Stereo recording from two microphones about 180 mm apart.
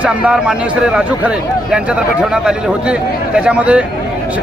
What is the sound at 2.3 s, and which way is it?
A man's voice, 5° right (ahead or behind).